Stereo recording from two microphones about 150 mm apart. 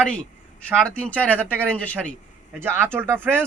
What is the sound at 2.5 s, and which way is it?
Speech, 15° right (ahead or behind).